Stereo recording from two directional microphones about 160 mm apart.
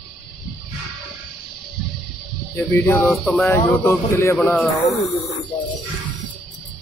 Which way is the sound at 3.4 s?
15° left (ahead or behind).